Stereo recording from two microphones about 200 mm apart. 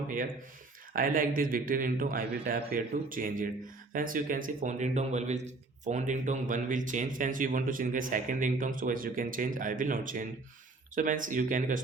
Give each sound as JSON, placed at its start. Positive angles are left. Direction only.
{"t": 0.9, "sound": "a man's voice", "side_deg": -45}